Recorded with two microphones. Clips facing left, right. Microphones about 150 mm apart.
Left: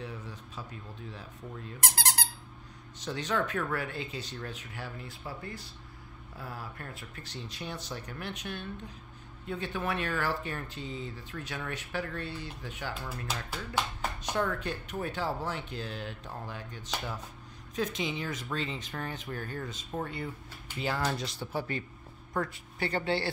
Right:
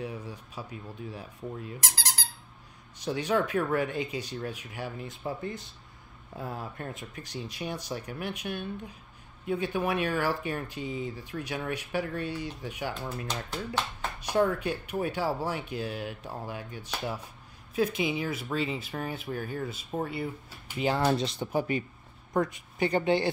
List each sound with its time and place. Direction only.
0.0 s speech: 10° right (ahead or behind)
1.8 s squeak: 60° left (ahead or behind)
3.0 s speech: 10° right (ahead or behind)
13.3 s speech: 5° left (ahead or behind)
14.2 s speech: 10° right (ahead or behind)
20.7 s speech: 20° right (ahead or behind)